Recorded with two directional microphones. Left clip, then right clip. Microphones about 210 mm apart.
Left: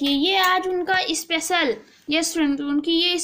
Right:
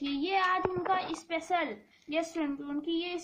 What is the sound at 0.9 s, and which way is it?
A woman's voice, 20° left (ahead or behind).